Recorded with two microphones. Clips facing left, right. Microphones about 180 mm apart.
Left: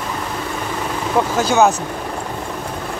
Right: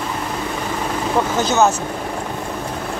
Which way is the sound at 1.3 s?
10° left (ahead or behind).